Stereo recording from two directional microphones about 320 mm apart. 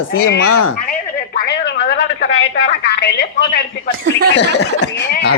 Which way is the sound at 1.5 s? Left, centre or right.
Left.